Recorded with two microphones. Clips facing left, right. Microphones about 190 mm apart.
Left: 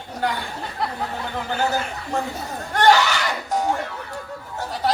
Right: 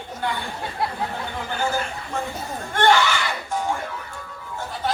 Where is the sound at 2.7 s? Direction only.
40° left (ahead or behind).